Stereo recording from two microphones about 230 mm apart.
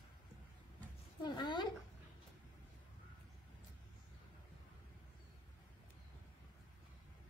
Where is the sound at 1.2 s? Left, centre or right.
Centre.